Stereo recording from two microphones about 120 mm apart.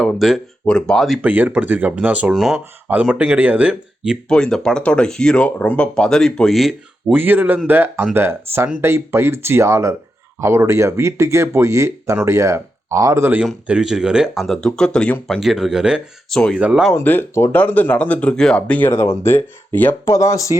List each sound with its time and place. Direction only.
0.0 s speech: centre (ahead or behind)
1.3 s speech: 15° right (ahead or behind)
4.3 s speech: 5° left (ahead or behind)
7.1 s speech: 15° right (ahead or behind)
13.4 s speech: 5° right (ahead or behind)
15.4 s speech: 5° right (ahead or behind)
16.6 s speech: 10° right (ahead or behind)
16.9 s speech: 15° left (ahead or behind)
20.1 s speech: 25° left (ahead or behind)